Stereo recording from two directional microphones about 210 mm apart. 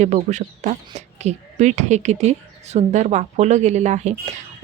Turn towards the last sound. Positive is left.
turn(degrees=-35)  # may be behind; listen again after turning